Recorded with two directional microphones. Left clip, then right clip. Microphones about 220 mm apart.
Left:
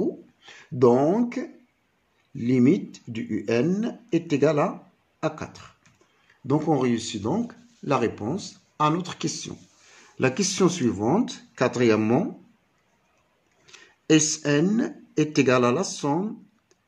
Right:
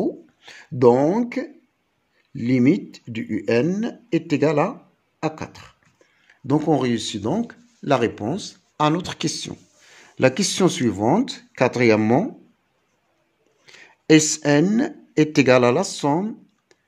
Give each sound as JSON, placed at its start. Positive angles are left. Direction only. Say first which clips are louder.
{"t": 0.0, "sound": "a sound", "louder": "right 3 dB", "side_deg": -35}
{"t": 2.3, "sound": "speech", "louder": "right 2 dB", "side_deg": -35}
{"t": 13.7, "sound": "speech", "louder": "right 5 dB", "side_deg": -35}